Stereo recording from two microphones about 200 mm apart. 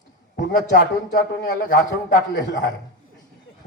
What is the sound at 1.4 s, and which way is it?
A man's voice, 40° left (ahead or behind).